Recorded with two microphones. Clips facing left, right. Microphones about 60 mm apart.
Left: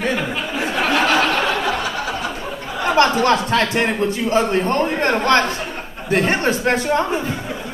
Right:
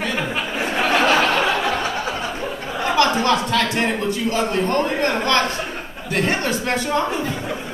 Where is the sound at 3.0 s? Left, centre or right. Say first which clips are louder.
Left 3 dB; left.